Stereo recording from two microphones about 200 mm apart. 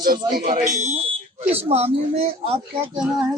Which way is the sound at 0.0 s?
45° right (ahead or behind).